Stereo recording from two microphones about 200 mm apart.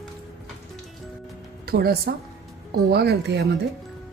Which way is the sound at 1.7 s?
50° right (ahead or behind).